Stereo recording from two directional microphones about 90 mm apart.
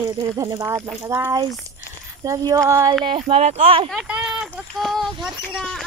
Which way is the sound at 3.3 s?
60° right (ahead or behind).